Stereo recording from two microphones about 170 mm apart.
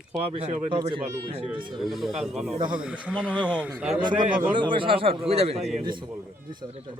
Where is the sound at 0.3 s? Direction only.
30° right (ahead or behind).